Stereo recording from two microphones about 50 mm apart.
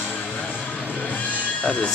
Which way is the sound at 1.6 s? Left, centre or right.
Left.